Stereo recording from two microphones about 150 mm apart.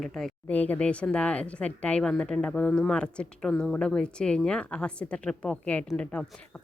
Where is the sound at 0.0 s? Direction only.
Centre (ahead or behind).